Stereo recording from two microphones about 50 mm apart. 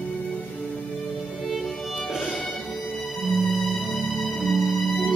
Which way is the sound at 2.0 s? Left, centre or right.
Centre.